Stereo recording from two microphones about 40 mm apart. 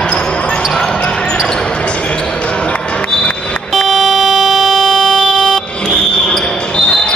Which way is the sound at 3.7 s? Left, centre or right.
Centre.